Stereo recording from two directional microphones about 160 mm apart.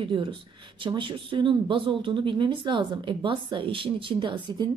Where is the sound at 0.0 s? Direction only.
30° right (ahead or behind).